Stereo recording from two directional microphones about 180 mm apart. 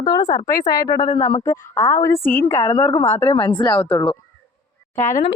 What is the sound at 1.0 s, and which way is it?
Speech, 30° left (ahead or behind).